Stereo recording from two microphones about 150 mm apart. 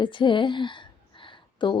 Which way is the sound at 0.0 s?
30° left (ahead or behind).